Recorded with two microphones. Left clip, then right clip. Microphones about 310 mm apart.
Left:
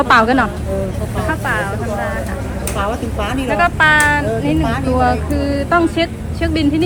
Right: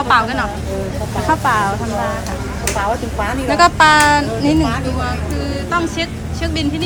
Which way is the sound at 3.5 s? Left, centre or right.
Centre.